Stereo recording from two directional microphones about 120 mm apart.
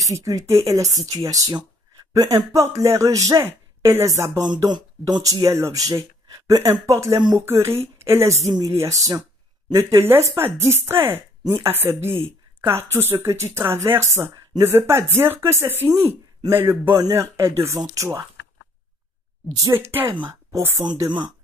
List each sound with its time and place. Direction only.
0.0 s speech: 25° right (ahead or behind)
4.6 s speech: 35° right (ahead or behind)
19.6 s speech: 20° right (ahead or behind)
20.8 s speech: 35° right (ahead or behind)